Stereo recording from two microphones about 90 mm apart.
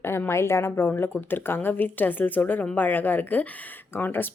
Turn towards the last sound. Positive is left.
turn(degrees=20)  # may be behind; listen again after turning